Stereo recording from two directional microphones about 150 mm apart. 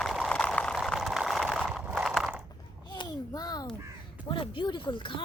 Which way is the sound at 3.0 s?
25° left (ahead or behind).